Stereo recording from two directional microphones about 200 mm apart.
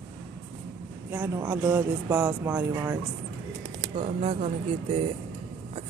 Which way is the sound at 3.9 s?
30° right (ahead or behind).